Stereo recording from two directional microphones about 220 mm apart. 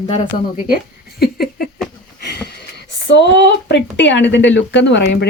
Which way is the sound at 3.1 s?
50° left (ahead or behind).